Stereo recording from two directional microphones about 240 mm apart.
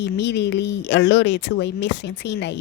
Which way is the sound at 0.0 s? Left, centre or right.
Left.